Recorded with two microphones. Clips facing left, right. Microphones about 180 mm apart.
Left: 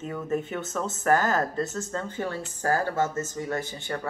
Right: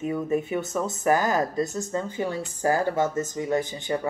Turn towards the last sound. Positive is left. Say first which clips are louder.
# right 6 dB
turn(degrees=-15)  # may be behind; listen again after turning